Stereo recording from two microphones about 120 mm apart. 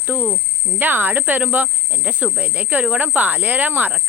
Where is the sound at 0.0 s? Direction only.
15° right (ahead or behind).